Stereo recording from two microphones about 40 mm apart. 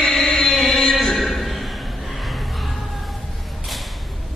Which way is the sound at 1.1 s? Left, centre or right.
Centre.